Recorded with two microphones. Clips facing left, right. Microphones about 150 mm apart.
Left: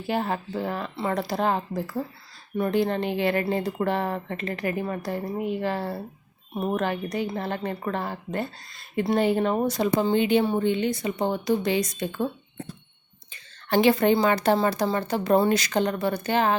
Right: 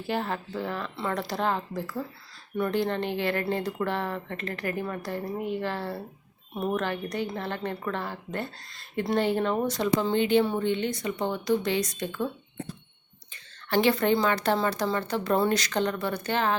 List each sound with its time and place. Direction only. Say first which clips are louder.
0.1 s a woman's voice: left 3 dB; 15° left (ahead or behind)
13.3 s a woman's voice: left 3 dB; 15° left (ahead or behind)